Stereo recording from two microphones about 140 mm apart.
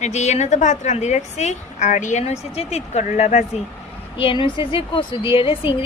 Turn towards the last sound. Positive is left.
turn(degrees=40)  # may be behind; listen again after turning